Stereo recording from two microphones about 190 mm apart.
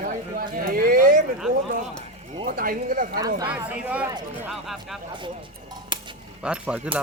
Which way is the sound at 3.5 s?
5° right (ahead or behind).